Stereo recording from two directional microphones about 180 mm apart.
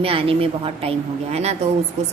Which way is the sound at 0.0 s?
30° right (ahead or behind).